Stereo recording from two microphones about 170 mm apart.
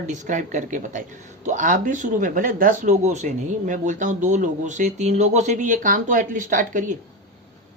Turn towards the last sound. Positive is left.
turn(degrees=-50)  # may be behind; listen again after turning